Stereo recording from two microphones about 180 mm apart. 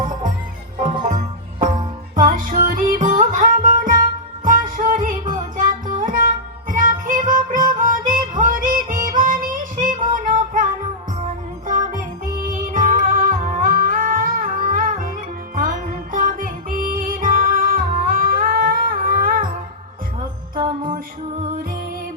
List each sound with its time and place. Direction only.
0.8 s music: 30° right (ahead or behind)
2.1 s music: 50° right (ahead or behind)
20.6 s music: 30° right (ahead or behind)